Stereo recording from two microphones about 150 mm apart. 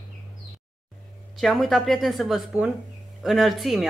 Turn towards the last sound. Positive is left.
turn(degrees=0)  # may be behind; listen again after turning